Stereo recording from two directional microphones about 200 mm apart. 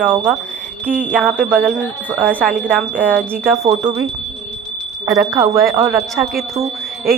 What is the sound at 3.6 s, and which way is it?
Speech, 30° right (ahead or behind).